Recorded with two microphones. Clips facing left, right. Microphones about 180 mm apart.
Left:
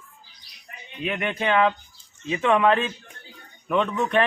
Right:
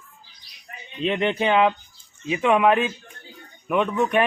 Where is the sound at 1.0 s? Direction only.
25° right (ahead or behind).